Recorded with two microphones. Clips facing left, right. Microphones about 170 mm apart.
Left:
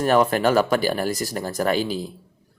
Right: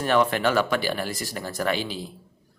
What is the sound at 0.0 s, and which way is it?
A man's voice, 40° left (ahead or behind).